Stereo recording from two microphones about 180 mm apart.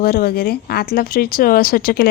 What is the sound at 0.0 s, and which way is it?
A woman's voice, 60° left (ahead or behind).